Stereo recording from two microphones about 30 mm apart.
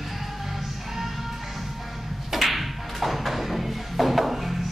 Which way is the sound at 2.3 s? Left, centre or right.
Centre.